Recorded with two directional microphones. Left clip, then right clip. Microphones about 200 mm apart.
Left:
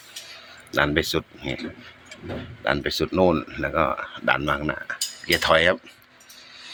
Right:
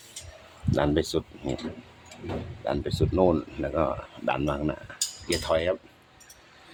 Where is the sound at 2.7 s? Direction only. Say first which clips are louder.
Left 5 dB; 5° right (ahead or behind).